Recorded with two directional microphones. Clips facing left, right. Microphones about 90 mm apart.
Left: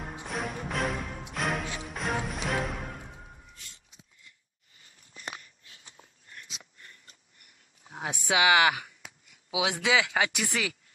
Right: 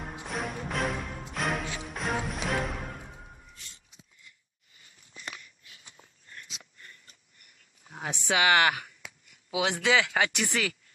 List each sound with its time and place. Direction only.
0.0 s music: centre (ahead or behind)
5.2 s a sound: 35° left (ahead or behind)
7.8 s speech: 10° left (ahead or behind)